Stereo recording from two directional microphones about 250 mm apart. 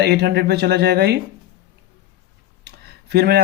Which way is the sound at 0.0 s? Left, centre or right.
Right.